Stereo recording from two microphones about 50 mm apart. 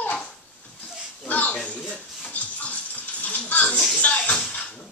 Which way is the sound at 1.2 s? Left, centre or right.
Left.